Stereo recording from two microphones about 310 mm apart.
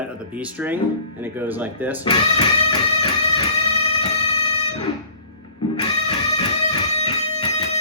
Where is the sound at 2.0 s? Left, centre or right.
Centre.